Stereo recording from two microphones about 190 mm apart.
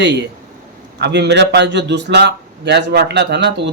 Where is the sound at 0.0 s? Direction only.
65° right (ahead or behind).